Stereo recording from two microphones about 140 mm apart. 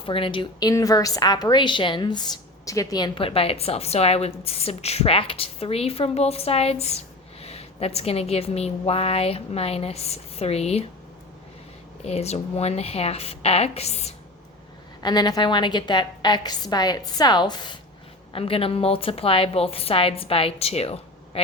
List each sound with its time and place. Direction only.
0.0 s a woman's voice: 40° left (ahead or behind)
0.7 s a woman's voice: 25° left (ahead or behind)
3.2 s a woman's voice: 45° left (ahead or behind)
12.0 s a woman's voice: 50° left (ahead or behind)
15.0 s a woman's voice: 30° left (ahead or behind)